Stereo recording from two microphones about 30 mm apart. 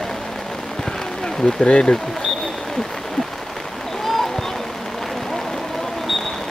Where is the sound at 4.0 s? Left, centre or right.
Centre.